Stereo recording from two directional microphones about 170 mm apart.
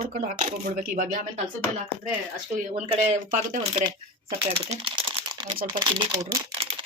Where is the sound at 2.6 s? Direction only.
40° right (ahead or behind).